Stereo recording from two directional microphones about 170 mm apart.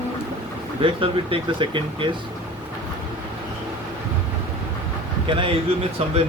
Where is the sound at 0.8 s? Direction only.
30° right (ahead or behind).